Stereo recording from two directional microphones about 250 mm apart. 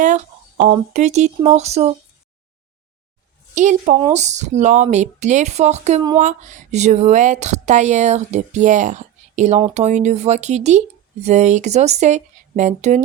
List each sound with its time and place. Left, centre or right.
0.0 s speech: right
3.5 s speech: right